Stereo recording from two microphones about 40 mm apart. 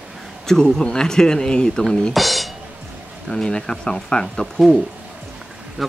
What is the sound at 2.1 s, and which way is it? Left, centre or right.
Speech, centre.